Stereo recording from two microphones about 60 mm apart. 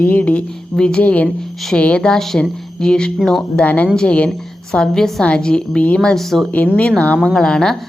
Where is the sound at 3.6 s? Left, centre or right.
Left.